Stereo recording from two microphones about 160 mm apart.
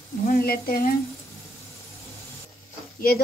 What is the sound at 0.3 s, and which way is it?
Speech, 70° left (ahead or behind).